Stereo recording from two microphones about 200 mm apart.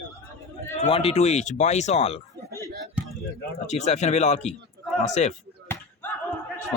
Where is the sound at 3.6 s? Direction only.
35° left (ahead or behind).